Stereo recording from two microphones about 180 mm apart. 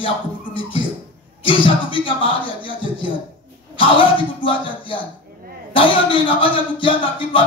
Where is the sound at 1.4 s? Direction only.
30° left (ahead or behind).